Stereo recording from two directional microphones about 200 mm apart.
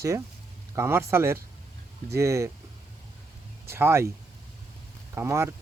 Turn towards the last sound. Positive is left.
turn(degrees=-15)  # may be behind; listen again after turning